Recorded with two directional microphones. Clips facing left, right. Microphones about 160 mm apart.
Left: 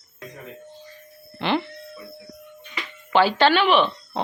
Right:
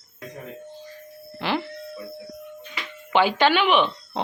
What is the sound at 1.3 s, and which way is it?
Music, 10° right (ahead or behind).